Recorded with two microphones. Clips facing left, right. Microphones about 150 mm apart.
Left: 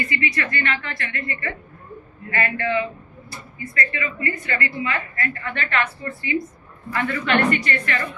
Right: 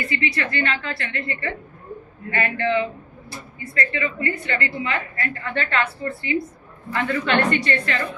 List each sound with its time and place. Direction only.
0.1 s a woman's voice: 30° right (ahead or behind)